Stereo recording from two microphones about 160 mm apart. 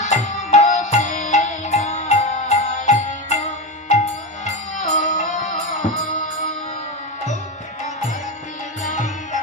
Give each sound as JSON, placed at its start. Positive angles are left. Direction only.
{"t": 0.0, "sound": "music", "side_deg": 50}
{"t": 4.4, "sound": "music", "side_deg": 50}
{"t": 8.8, "sound": "music", "side_deg": 50}